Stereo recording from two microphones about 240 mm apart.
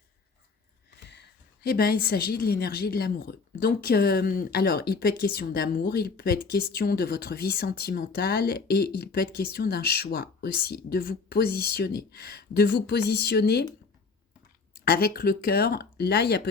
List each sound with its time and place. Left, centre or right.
1.0 s a woman's voice: left
14.8 s a woman's voice: left